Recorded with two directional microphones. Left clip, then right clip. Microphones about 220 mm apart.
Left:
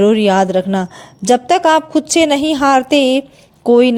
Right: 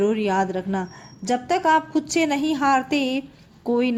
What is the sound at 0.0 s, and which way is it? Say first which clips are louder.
A woman's voice: left 10 dB; 35° left (ahead or behind).